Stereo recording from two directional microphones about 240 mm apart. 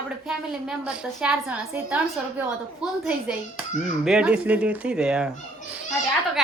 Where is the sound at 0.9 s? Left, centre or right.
Centre.